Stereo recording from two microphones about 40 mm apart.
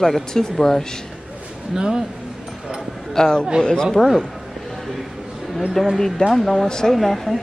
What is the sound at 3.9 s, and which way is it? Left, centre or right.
Speech, centre.